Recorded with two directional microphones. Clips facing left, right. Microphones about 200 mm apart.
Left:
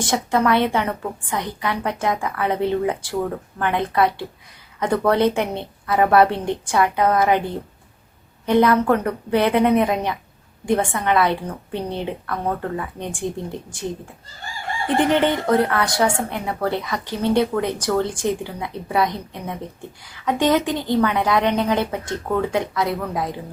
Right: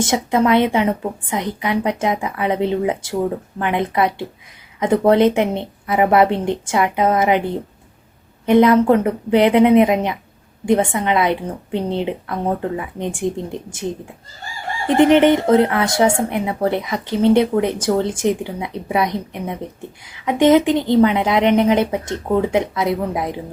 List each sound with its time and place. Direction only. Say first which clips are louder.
0.0 s speech: right 3 dB; 20° right (ahead or behind)